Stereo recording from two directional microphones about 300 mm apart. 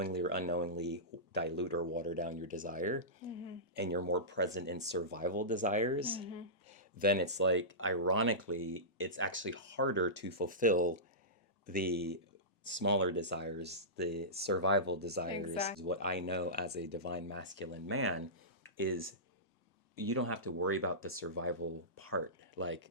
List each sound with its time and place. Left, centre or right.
0.0 s speech: right
6.7 s speech: right
20.1 s speech: right